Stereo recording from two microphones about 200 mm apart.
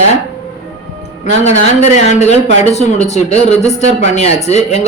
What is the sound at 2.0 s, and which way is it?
Speech, 35° left (ahead or behind).